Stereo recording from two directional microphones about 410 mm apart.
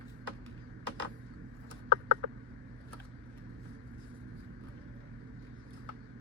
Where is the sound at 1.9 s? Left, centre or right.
Right.